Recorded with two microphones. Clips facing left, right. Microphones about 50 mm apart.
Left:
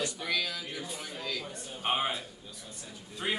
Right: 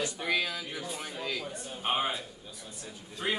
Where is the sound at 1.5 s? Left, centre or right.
Centre.